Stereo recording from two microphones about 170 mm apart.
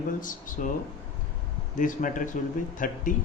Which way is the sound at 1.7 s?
50° left (ahead or behind).